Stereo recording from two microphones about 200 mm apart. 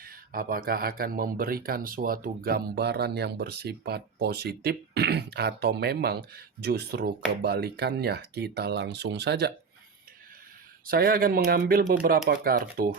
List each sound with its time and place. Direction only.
0.0 s speech: 45° right (ahead or behind)
10.8 s speech: 45° right (ahead or behind)